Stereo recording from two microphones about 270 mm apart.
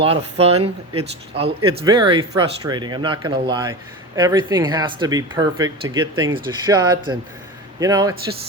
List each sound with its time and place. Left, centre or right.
0.0 s speech: right